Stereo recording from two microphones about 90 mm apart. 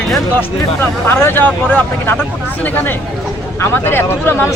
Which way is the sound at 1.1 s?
25° left (ahead or behind).